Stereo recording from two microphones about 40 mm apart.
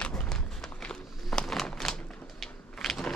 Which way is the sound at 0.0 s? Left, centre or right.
Centre.